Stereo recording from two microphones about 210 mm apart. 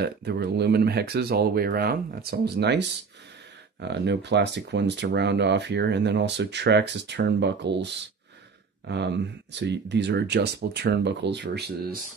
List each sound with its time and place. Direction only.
0.0 s speech: 50° right (ahead or behind)
3.8 s speech: 55° right (ahead or behind)